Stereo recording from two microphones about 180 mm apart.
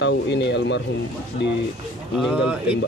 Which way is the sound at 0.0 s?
75° left (ahead or behind).